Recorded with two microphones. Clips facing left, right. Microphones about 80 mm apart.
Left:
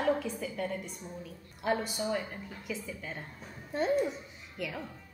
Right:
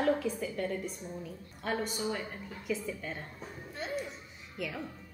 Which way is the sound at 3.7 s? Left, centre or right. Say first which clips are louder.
Left 9 dB; left.